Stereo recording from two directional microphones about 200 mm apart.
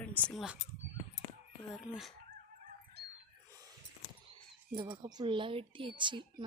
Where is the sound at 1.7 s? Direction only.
5° right (ahead or behind).